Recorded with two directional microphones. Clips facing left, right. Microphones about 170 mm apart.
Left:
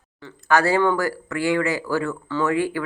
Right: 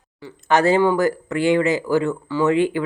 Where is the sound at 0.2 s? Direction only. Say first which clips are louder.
Right 2 dB; 20° right (ahead or behind).